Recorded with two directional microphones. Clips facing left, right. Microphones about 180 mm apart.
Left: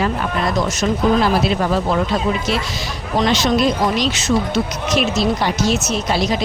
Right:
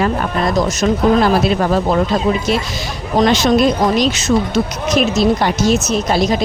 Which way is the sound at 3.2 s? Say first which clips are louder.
Right 4 dB; 45° right (ahead or behind).